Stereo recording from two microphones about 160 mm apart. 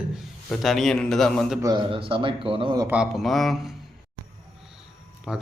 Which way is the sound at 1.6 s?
25° right (ahead or behind).